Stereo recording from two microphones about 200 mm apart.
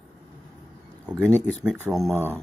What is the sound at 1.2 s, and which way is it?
Speech, 10° left (ahead or behind).